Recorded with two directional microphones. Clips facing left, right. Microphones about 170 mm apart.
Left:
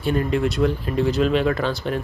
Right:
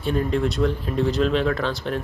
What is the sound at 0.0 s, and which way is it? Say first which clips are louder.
Speech: left 1 dB; 5° left (ahead or behind).